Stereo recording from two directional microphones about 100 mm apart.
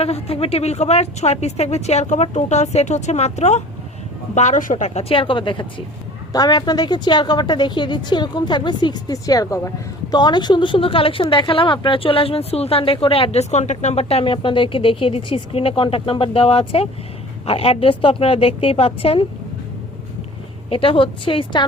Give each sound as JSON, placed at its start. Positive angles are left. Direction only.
{"t": 0.0, "sound": "speech", "side_deg": 85}
{"t": 4.9, "sound": "a woman's voice", "side_deg": 70}
{"t": 6.3, "sound": "a woman's voice", "side_deg": 40}
{"t": 20.7, "sound": "a woman's voice", "side_deg": 65}